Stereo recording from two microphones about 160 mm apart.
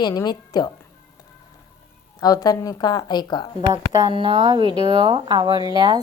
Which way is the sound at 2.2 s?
25° left (ahead or behind).